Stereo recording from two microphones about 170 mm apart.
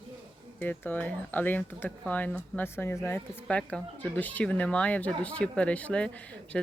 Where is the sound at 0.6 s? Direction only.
10° left (ahead or behind).